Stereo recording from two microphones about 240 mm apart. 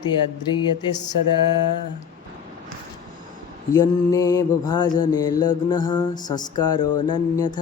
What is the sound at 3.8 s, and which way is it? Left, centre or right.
Mantra, centre.